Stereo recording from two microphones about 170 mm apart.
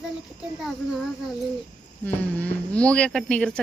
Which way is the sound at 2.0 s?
10° left (ahead or behind).